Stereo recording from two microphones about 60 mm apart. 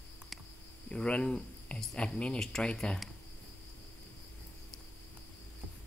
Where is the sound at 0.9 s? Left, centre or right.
Centre.